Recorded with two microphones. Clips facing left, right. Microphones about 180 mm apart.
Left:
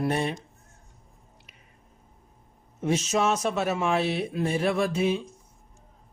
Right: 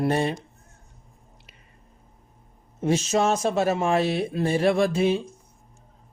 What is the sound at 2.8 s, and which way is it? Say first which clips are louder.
Speech: right 3 dB; 35° right (ahead or behind).